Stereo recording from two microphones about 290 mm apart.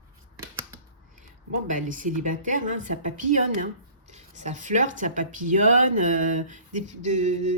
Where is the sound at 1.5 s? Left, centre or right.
Right.